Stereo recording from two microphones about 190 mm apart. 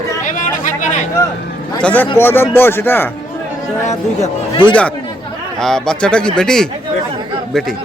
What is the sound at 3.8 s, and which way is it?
Speech, 35° left (ahead or behind).